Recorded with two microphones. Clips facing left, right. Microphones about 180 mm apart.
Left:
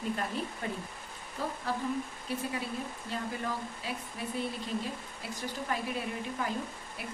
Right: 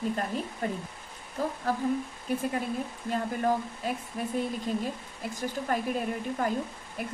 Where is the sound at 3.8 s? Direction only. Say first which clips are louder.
Right 7 dB; 50° right (ahead or behind).